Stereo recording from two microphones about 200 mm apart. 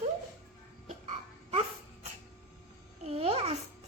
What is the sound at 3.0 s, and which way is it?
Babbling, 30° right (ahead or behind).